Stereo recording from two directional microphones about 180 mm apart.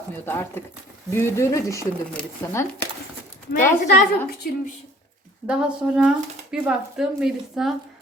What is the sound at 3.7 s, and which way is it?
Speech, 50° left (ahead or behind).